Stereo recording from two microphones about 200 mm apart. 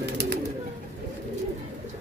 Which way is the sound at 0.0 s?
60° right (ahead or behind).